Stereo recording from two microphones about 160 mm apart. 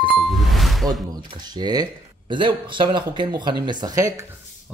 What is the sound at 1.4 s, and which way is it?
Speech, 25° right (ahead or behind).